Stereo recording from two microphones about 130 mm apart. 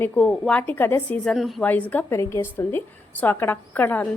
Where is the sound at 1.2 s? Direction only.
Centre (ahead or behind).